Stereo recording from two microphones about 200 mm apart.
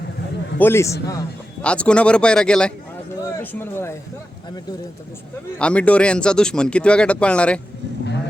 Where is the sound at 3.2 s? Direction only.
10° left (ahead or behind).